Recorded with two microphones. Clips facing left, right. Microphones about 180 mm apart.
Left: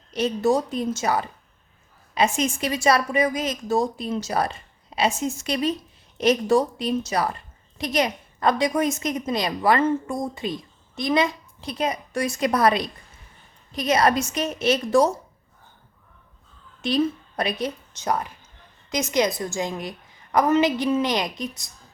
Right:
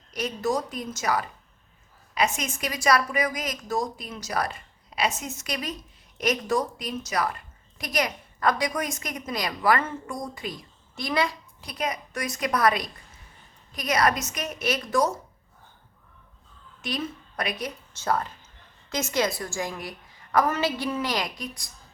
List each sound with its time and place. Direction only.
0.1 s a woman's voice: 25° left (ahead or behind)
16.8 s a woman's voice: 30° left (ahead or behind)
17.9 s a woman's voice: 15° left (ahead or behind)